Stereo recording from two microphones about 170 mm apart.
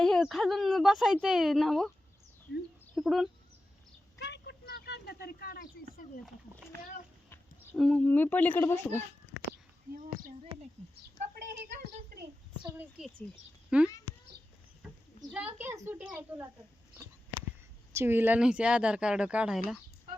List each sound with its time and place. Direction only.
0.0 s speech: centre (ahead or behind)
2.9 s speech: centre (ahead or behind)
4.2 s a sound: 80° left; by 6.1 s 60° left (ahead or behind)
7.8 s a child's voice: 5° left (ahead or behind)
9.9 s speech: 55° right (ahead or behind)
12.6 s speech: 15° right (ahead or behind)
17.9 s speech: 15° right (ahead or behind)